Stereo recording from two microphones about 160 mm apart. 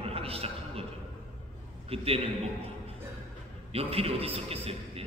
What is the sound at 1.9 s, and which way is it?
Speech, 35° right (ahead or behind).